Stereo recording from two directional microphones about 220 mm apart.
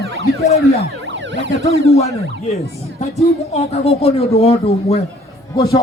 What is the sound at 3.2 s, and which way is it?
Speech, 30° left (ahead or behind).